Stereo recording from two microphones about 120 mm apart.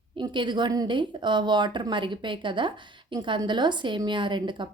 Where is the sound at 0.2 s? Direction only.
40° right (ahead or behind).